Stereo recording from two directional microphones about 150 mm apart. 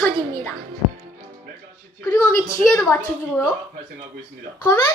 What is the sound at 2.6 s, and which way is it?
Speech, centre (ahead or behind).